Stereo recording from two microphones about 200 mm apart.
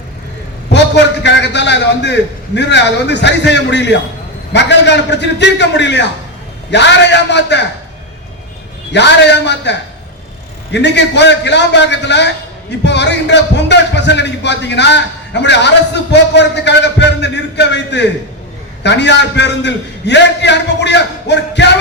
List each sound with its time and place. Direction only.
0.7 s a sound: 60° left (ahead or behind)
2.6 s speech: 60° left (ahead or behind)
8.9 s speech: 60° left (ahead or behind)